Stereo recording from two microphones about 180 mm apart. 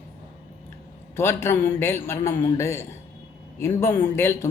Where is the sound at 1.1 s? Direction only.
15° left (ahead or behind).